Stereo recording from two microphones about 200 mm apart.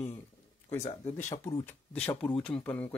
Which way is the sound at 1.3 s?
20° left (ahead or behind).